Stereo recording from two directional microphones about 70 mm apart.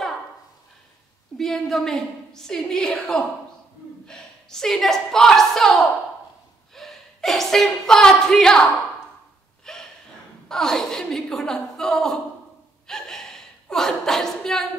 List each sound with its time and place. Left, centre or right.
1.4 s a woman's voice: centre
9.7 s gasp: centre
10.5 s chuckle: centre
12.8 s a sound: centre